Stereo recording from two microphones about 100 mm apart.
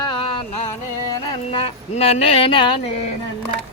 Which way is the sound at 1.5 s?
90° left.